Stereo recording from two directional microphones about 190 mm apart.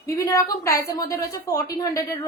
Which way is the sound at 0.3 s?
20° left (ahead or behind).